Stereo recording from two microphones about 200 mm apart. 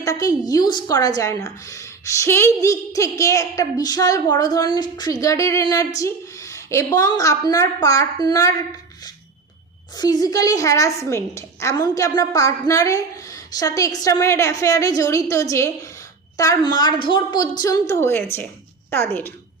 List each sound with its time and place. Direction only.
0.0 s a woman's voice: 15° left (ahead or behind)
9.9 s a woman's voice: 20° left (ahead or behind)